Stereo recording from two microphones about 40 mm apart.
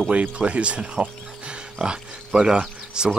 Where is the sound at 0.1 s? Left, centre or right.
Right.